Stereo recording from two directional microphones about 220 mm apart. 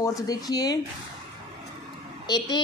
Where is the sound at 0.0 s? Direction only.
15° left (ahead or behind).